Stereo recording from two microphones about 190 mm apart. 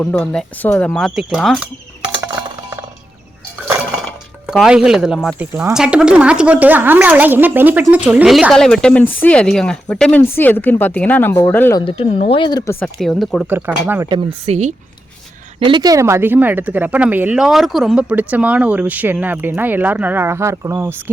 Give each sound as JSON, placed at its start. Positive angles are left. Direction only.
{"t": 0.0, "sound": "a woman's voice", "side_deg": 5}
{"t": 4.0, "sound": "a woman's voice", "side_deg": 0}
{"t": 11.9, "sound": "speech", "side_deg": 30}
{"t": 12.8, "sound": "a woman's voice", "side_deg": 0}
{"t": 13.5, "sound": "speech", "side_deg": -10}
{"t": 14.1, "sound": "a woman's voice", "side_deg": -30}
{"t": 15.6, "sound": "speech", "side_deg": -20}